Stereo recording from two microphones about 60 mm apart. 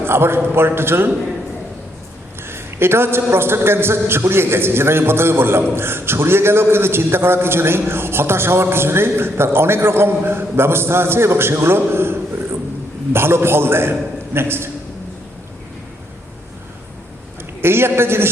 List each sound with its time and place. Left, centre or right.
0.0 s a man's voice: right
2.5 s a man's voice: right
17.6 s a man's voice: right